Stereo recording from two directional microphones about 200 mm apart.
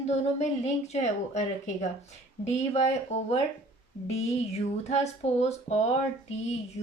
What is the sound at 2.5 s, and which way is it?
Speech, 35° left (ahead or behind).